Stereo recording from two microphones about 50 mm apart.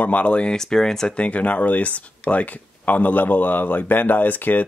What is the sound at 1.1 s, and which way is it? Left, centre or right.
Speech, left.